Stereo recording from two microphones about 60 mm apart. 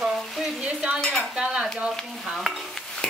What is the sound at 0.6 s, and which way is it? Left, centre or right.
Speech, centre.